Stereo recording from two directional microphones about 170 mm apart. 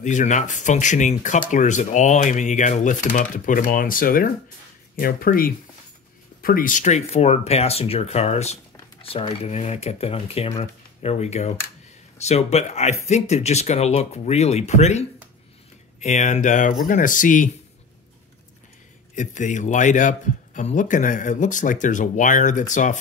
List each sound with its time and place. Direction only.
0.0 s speech: 45° left (ahead or behind)
19.1 s speech: 45° left (ahead or behind)